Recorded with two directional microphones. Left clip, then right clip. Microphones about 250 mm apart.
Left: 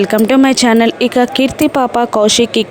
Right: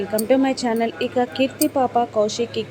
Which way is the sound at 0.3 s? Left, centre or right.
Left.